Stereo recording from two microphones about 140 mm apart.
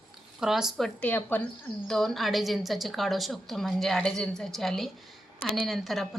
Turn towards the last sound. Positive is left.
turn(degrees=0)  # may be behind; listen again after turning